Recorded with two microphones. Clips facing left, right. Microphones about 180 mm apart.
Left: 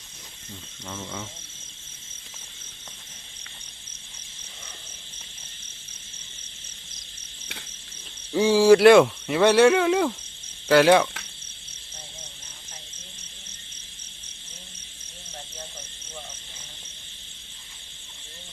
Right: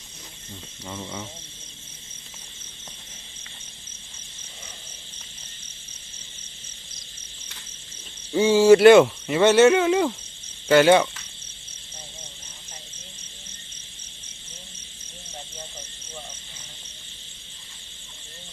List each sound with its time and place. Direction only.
0.9 s speech: 15° right (ahead or behind)
8.3 s speech: centre (ahead or behind)